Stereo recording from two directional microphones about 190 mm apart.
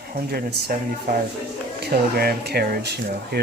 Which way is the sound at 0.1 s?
55° right (ahead or behind).